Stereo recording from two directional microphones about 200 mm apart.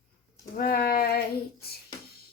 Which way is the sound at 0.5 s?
45° left (ahead or behind).